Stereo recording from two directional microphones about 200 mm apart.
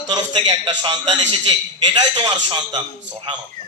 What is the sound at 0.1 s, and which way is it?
A man's voice, 20° right (ahead or behind).